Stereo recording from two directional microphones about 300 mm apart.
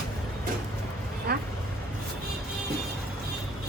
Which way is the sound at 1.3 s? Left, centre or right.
Right.